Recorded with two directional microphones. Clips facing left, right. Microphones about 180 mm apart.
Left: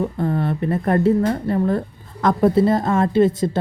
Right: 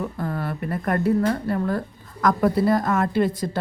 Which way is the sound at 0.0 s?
25° left (ahead or behind).